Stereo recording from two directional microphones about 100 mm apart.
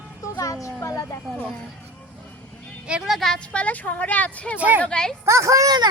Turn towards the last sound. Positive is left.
turn(degrees=-40)  # may be behind; listen again after turning